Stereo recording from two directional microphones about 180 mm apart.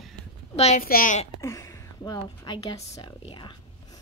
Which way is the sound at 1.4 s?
15° left (ahead or behind).